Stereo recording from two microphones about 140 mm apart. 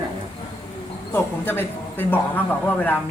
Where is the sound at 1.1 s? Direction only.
15° left (ahead or behind).